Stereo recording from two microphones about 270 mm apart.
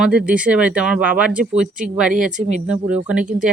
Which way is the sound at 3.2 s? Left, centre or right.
Right.